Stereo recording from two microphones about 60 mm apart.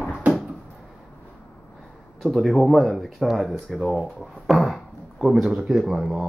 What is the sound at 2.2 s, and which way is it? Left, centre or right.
Speech, centre.